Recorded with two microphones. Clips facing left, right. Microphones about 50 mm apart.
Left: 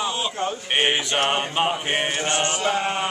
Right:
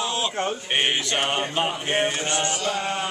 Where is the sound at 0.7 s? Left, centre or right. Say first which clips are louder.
Left 2 dB; centre.